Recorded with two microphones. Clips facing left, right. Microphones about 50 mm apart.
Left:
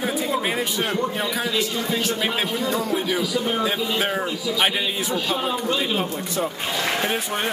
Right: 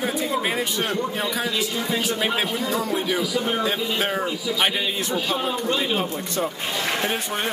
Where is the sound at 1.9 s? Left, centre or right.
Centre.